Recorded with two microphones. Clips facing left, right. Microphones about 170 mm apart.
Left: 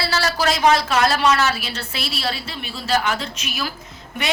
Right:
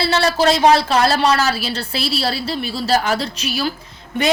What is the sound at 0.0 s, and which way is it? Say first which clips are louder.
A woman's voice: right 5 dB; 25° right (ahead or behind).